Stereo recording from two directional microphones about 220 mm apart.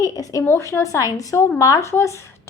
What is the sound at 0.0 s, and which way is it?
A woman's voice, 15° left (ahead or behind).